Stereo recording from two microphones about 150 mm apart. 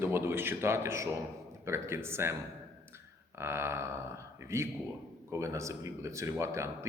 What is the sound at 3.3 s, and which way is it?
A man's voice, 15° right (ahead or behind).